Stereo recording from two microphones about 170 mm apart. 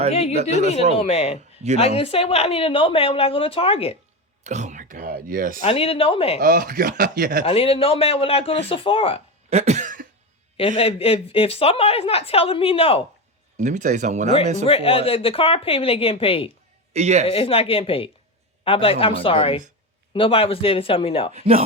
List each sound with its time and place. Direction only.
0.1 s a woman's voice: 35° left (ahead or behind)
0.6 s speech: 40° right (ahead or behind)
0.9 s a woman's voice: 35° left (ahead or behind)
4.4 s speech: 45° right (ahead or behind)
5.6 s a woman's voice: 35° left (ahead or behind)
6.4 s speech: 60° right (ahead or behind)
7.4 s a woman's voice: 35° left (ahead or behind)
9.5 s cough: 40° right (ahead or behind)
10.6 s a woman's voice: 35° left (ahead or behind)
13.6 s speech: 45° right (ahead or behind)
14.7 s a woman's voice: 35° left (ahead or behind)
16.9 s speech: 40° right (ahead or behind)
17.2 s a woman's voice: 35° left (ahead or behind)
21.3 s speech: 35° right (ahead or behind)